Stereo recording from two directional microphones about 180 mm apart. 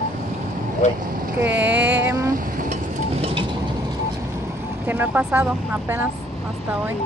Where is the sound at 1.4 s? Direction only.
10° right (ahead or behind).